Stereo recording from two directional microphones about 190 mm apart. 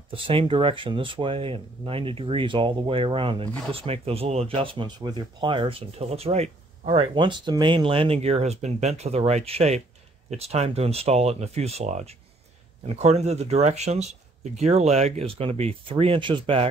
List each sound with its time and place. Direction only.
0.1 s speech: 30° right (ahead or behind)